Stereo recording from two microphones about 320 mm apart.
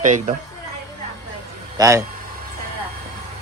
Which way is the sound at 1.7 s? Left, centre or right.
Centre.